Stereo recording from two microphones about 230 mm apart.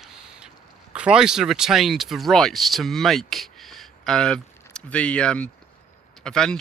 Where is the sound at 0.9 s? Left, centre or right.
Centre.